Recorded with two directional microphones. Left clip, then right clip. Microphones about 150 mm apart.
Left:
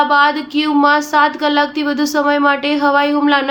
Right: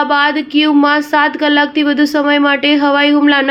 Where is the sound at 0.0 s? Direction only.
25° right (ahead or behind).